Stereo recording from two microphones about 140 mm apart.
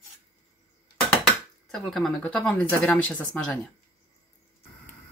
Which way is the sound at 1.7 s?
5° left (ahead or behind).